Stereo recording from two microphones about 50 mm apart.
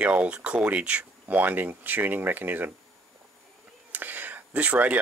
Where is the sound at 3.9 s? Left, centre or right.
Right.